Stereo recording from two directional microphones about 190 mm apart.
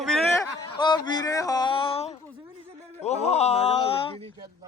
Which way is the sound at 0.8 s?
25° left (ahead or behind).